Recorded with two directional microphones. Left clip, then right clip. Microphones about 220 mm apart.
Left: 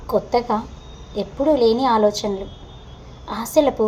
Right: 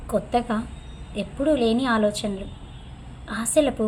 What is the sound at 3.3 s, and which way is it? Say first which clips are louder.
Speech: left 4 dB; 20° right (ahead or behind).